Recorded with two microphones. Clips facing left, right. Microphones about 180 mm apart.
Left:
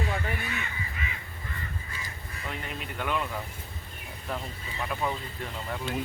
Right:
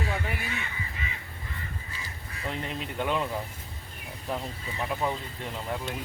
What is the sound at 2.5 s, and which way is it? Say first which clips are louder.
Speech: right 4 dB; 25° right (ahead or behind).